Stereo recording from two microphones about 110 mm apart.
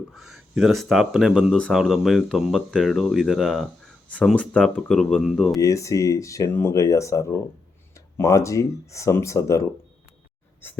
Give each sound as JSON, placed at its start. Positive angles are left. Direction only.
{"t": 0.1, "sound": "speech", "side_deg": 0}
{"t": 4.4, "sound": "speech", "side_deg": 10}
{"t": 5.5, "sound": "speech", "side_deg": 30}